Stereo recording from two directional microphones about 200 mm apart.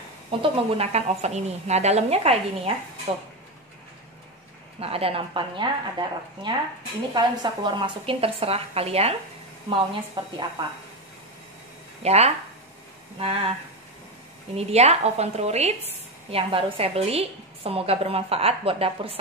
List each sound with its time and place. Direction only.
0.3 s a woman's voice: 25° right (ahead or behind)
4.7 s a woman's voice: 30° right (ahead or behind)
10.2 s a woman's voice: 25° right (ahead or behind)
12.0 s a woman's voice: 30° right (ahead or behind)
14.5 s a woman's voice: 30° right (ahead or behind)